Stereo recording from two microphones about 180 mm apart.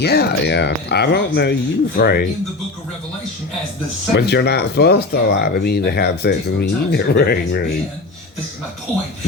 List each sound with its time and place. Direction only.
0.0 s speech: 60° left (ahead or behind)
4.1 s speech: 65° left (ahead or behind)